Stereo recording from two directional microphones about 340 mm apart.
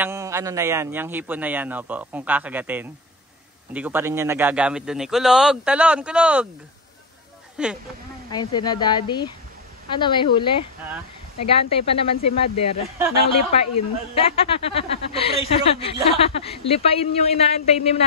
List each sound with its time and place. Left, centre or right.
0.0 s a man's voice: centre
7.6 s a man's voice: centre
8.3 s a woman's voice: centre
11.5 s a woman's voice: centre
13.5 s a woman's voice: centre